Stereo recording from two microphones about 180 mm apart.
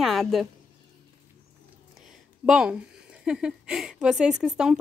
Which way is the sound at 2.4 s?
5° right (ahead or behind).